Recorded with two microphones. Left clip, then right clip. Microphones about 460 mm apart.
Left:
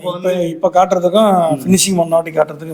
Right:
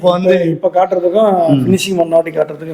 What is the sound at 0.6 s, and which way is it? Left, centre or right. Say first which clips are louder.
A man's voice: even; left.